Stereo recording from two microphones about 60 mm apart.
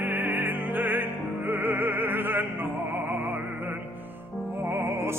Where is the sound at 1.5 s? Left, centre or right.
Right.